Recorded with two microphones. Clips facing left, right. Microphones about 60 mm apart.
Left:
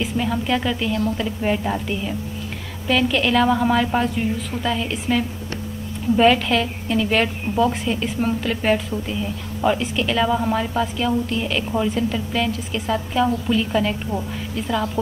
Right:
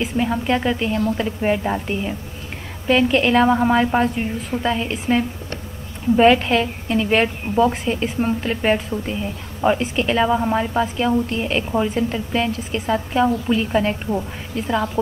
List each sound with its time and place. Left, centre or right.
0.0 s a woman's voice: right
14.1 s speech: centre
14.5 s a woman's voice: right